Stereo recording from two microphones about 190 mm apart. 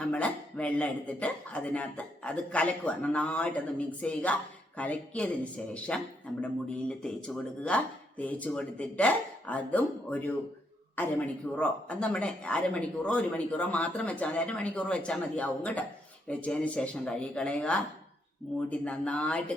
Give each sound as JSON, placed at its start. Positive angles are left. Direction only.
{"t": 0.0, "sound": "speech", "side_deg": 5}